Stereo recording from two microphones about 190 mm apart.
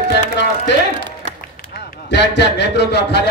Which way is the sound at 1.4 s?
55° left (ahead or behind).